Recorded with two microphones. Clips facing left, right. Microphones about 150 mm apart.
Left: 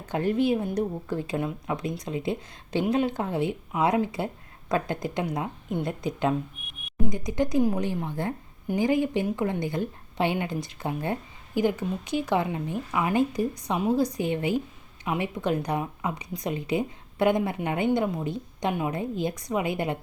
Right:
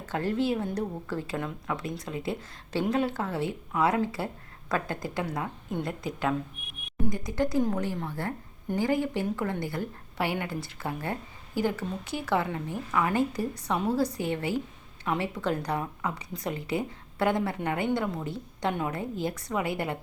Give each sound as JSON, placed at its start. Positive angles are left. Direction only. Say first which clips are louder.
{"t": 0.1, "sound": "speech", "louder": "left 4 dB", "side_deg": 15}